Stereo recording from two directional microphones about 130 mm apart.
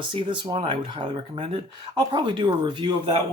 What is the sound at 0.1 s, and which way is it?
Speech, 40° right (ahead or behind).